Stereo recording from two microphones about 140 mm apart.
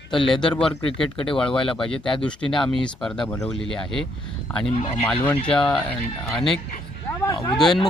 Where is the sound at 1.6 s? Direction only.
40° left (ahead or behind).